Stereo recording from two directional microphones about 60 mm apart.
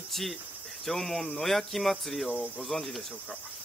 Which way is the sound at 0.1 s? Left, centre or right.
Centre.